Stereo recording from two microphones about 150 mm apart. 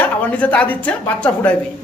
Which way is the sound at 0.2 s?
10° left (ahead or behind).